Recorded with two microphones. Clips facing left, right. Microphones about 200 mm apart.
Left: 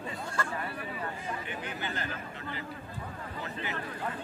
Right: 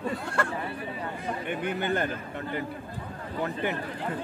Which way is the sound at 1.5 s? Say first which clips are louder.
Right 9 dB; 55° right (ahead or behind).